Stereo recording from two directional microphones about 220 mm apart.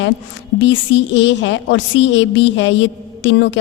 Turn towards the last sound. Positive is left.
turn(degrees=55)  # may be behind; listen again after turning